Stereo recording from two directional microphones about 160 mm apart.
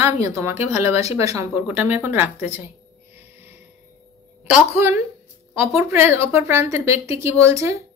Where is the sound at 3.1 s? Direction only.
15° right (ahead or behind).